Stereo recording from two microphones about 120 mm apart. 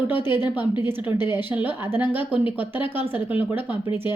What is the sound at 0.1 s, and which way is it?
A woman's voice, 20° right (ahead or behind).